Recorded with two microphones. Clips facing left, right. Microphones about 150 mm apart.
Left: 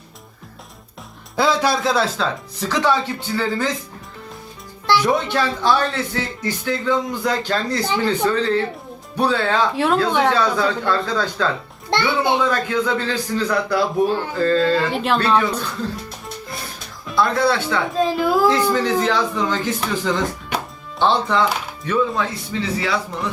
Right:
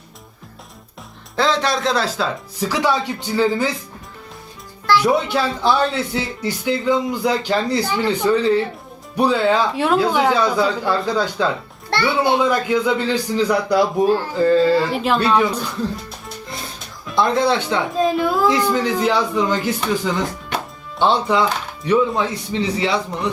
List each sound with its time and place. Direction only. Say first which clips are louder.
1.4 s a man's voice: left 1 dB; 10° left (ahead or behind); by 3.8 s 15° right (ahead or behind)
5.0 s a man's voice: right 1 dB; 5° right (ahead or behind)
9.7 s a woman's voice: right 1 dB; centre (ahead or behind)
11.9 s a child's voice: right 1 dB; 20° left (ahead or behind)
12.5 s a man's voice: right 2 dB; 10° right (ahead or behind)
14.9 s a woman's voice: right 1 dB; centre (ahead or behind)
15.2 s a man's voice: right 1 dB; 10° right (ahead or behind)
17.2 s speech: right 1 dB; 20° right (ahead or behind)
17.9 s a woman's voice: left 1 dB; centre (ahead or behind)
18.7 s a man's voice: right 1 dB; 10° right (ahead or behind)
21.0 s a man's voice: right 1 dB; 15° right (ahead or behind)